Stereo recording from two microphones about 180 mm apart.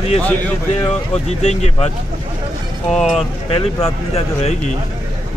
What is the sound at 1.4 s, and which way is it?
Speech, 35° left (ahead or behind).